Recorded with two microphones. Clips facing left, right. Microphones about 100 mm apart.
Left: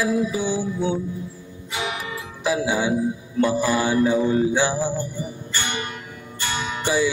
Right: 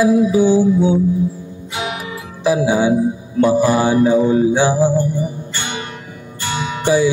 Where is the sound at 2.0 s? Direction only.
15° right (ahead or behind).